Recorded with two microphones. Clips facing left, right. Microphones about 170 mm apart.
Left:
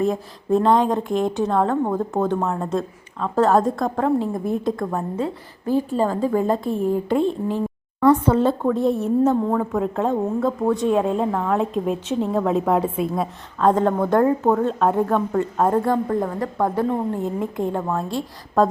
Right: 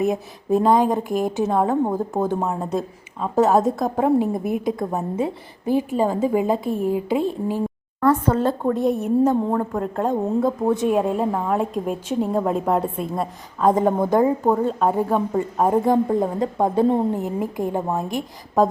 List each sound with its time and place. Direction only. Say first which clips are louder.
0.0 s a woman's voice: even; 10° right (ahead or behind)
1.6 s a woman's voice: right 1 dB; 15° right (ahead or behind)
2.0 s a woman's voice: left 1 dB; 5° right (ahead or behind)
9.6 s a woman's voice: left 1 dB; centre (ahead or behind)
10.7 s a woman's voice: left 1 dB; 20° right (ahead or behind)
10.9 s a woman's voice: even; 5° right (ahead or behind)
13.6 s a woman's voice: even; 10° right (ahead or behind)
14.2 s a woman's voice: left 1 dB; 5° right (ahead or behind)